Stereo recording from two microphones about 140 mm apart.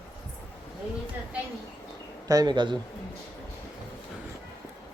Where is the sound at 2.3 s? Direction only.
30° right (ahead or behind).